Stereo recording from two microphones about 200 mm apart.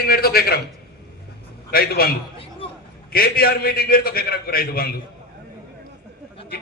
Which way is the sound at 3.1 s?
50° left (ahead or behind).